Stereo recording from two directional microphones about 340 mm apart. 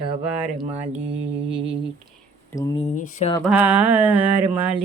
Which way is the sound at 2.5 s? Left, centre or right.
Centre.